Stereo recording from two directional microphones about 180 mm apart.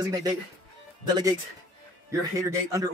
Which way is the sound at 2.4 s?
15° right (ahead or behind).